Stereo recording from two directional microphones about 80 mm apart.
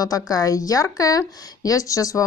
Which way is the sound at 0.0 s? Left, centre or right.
Left.